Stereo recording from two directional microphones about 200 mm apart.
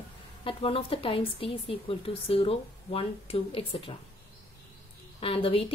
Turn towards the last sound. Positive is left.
turn(degrees=30)  # may be behind; listen again after turning